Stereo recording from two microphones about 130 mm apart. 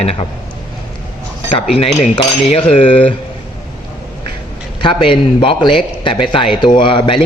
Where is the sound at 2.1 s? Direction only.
45° left (ahead or behind).